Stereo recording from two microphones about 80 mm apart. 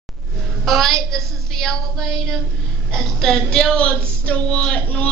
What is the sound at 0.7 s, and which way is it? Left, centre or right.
A woman's voice, centre.